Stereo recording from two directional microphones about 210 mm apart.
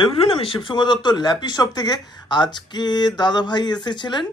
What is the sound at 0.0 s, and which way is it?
Speech, 25° left (ahead or behind).